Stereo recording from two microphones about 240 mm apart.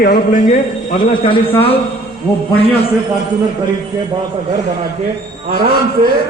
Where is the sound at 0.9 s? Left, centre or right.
Left.